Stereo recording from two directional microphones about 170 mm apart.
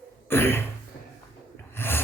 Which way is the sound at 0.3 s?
15° left (ahead or behind).